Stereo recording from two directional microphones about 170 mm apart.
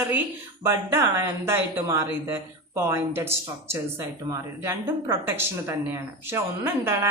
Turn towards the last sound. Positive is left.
turn(degrees=-15)  # may be behind; listen again after turning